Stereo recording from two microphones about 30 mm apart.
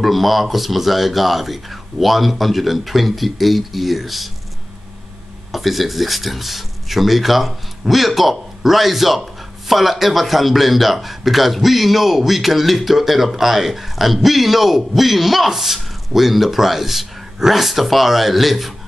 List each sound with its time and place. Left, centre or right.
0.0 s speech: centre
5.5 s speech: centre